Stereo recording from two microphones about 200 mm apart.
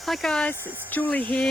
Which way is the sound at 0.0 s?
Centre (ahead or behind).